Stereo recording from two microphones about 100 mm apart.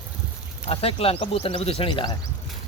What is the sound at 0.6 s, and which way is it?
Speech, 75° left (ahead or behind).